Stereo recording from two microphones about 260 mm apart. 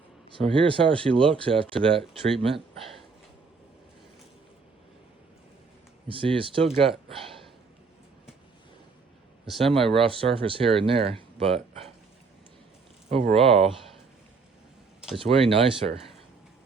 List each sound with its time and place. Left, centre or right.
0.3 s speech: right
6.1 s speech: right
9.5 s speech: centre
10.0 s speech: right
13.1 s speech: right
15.2 s speech: right